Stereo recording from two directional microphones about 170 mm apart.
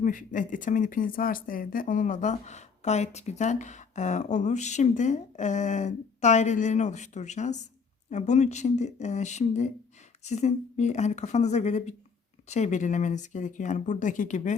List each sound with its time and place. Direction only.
0.0 s speech: 50° left (ahead or behind)